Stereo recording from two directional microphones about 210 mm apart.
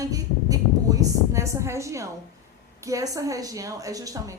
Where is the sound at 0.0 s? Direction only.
15° right (ahead or behind).